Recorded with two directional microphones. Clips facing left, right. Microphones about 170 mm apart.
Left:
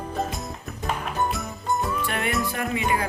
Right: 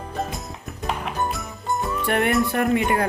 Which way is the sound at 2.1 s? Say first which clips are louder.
Right 7 dB; 60° right (ahead or behind).